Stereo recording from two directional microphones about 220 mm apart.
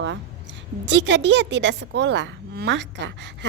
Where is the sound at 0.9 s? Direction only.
55° right (ahead or behind).